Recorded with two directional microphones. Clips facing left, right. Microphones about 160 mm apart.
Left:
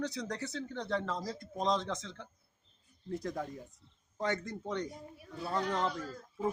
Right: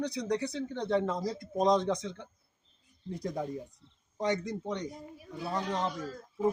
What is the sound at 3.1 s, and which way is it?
Speech, 15° right (ahead or behind).